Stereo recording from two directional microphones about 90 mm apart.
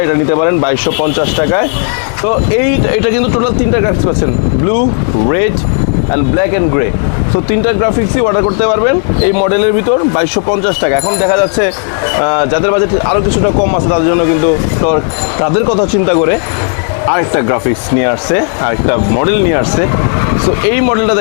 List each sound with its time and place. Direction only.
0.0 s speech: 25° left (ahead or behind)
6.1 s speech: 20° left (ahead or behind)